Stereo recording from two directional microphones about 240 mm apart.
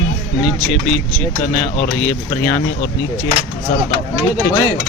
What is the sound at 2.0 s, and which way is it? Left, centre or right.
Speech, centre.